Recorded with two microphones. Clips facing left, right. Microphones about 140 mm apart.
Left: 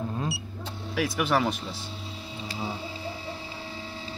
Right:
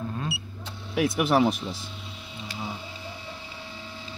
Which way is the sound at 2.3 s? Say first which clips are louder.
Left 1 dB; 30° left (ahead or behind).